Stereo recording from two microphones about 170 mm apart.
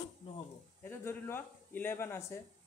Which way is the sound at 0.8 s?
10° left (ahead or behind).